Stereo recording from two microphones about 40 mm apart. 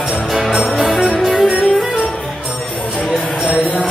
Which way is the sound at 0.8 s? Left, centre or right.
Centre.